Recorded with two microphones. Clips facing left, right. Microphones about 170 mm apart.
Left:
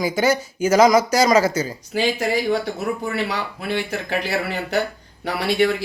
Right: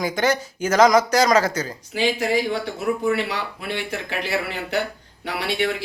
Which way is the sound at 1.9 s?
40° left (ahead or behind).